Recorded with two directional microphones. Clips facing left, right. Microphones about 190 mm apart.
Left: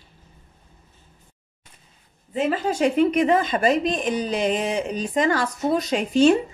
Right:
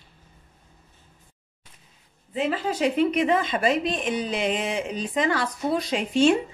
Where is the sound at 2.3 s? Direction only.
45° left (ahead or behind).